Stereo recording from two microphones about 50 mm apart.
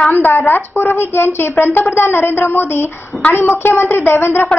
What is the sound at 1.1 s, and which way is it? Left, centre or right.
A woman's voice, left.